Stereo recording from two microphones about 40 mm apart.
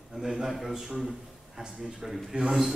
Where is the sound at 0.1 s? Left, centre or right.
Centre.